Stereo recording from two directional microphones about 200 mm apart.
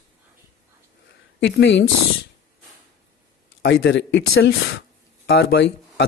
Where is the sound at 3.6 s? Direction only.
65° left (ahead or behind).